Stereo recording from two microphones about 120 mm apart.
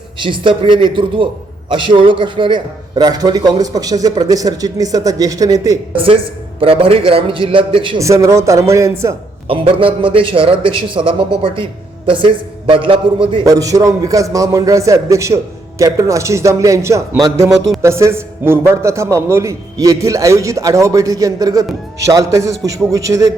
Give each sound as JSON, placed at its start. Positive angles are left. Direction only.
{"t": 0.2, "sound": "a man's voice", "side_deg": -45}
{"t": 6.0, "sound": "a man's voice", "side_deg": -45}
{"t": 7.9, "sound": "a man's voice", "side_deg": -25}
{"t": 9.5, "sound": "a man's voice", "side_deg": -50}
{"t": 13.4, "sound": "a man's voice", "side_deg": -30}